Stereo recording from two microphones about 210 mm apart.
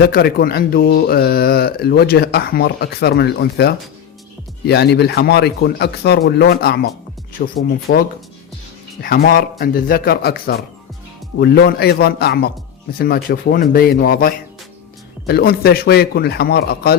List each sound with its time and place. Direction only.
0.0 s speech: 45° left (ahead or behind)